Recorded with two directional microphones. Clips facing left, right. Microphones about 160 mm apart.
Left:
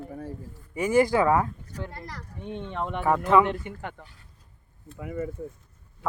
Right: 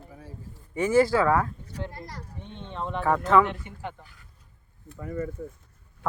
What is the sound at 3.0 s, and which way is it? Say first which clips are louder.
Speech: even; 10° left (ahead or behind).